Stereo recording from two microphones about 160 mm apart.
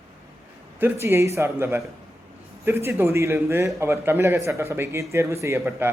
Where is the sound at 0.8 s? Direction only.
15° right (ahead or behind).